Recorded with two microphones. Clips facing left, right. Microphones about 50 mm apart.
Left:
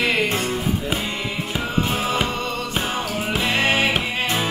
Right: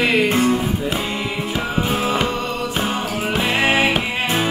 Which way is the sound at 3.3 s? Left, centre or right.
Centre.